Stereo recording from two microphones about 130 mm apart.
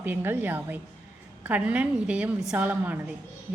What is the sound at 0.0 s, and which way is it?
A woman's voice, 15° right (ahead or behind).